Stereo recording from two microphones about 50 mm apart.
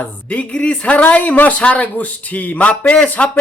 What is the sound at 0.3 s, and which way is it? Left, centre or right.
Speech, left.